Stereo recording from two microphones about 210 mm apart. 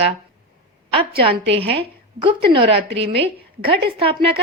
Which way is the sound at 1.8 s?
25° right (ahead or behind).